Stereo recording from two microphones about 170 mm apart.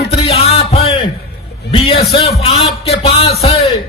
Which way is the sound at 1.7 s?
35° left (ahead or behind).